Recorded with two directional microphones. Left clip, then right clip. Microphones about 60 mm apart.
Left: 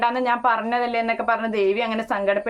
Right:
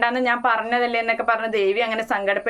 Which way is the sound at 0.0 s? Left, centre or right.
Left.